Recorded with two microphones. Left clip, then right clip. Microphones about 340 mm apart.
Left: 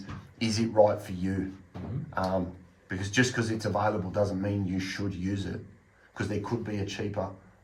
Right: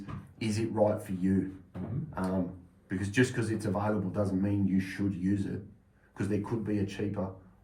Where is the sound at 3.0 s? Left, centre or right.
Left.